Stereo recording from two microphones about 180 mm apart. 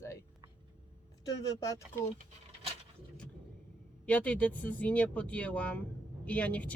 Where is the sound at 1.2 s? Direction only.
20° left (ahead or behind).